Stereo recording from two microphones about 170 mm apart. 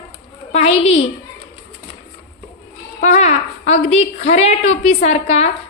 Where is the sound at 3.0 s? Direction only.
45° left (ahead or behind).